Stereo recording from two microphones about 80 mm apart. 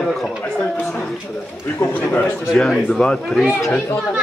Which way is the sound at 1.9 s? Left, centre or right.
Left.